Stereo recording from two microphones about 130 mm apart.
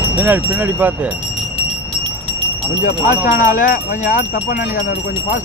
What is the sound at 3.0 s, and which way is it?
Speech, 85° left.